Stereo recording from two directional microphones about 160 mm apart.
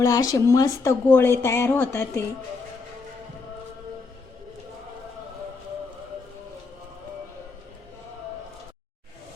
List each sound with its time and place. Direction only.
0.0 s speech: 20° left (ahead or behind)